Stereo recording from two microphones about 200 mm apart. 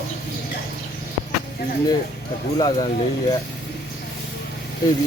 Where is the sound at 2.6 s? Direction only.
20° left (ahead or behind).